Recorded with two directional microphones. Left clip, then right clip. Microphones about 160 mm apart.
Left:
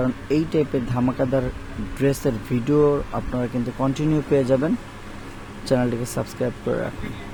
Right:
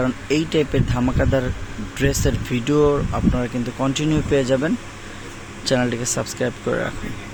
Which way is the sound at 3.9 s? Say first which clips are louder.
Right 1 dB; 5° left (ahead or behind).